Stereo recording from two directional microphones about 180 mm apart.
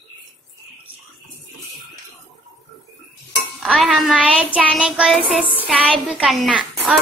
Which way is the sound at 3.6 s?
Centre (ahead or behind).